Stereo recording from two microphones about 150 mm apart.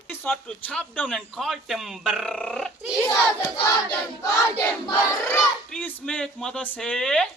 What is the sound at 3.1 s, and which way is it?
Crowd, 25° left (ahead or behind).